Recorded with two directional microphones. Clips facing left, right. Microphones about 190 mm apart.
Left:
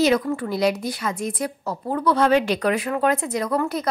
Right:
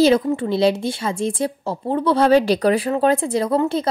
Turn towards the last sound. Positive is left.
turn(degrees=-25)  # may be behind; listen again after turning